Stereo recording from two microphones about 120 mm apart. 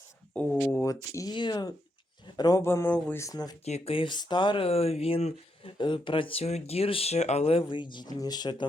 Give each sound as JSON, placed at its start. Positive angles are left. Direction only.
{"t": 0.3, "sound": "speech", "side_deg": 15}
{"t": 1.1, "sound": "speech", "side_deg": 35}
{"t": 2.6, "sound": "speech", "side_deg": 20}
{"t": 3.7, "sound": "speech", "side_deg": 60}